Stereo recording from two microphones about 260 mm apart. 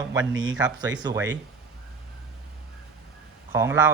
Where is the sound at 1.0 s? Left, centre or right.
Centre.